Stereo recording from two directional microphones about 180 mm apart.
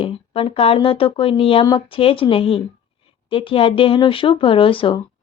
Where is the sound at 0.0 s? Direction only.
30° left (ahead or behind).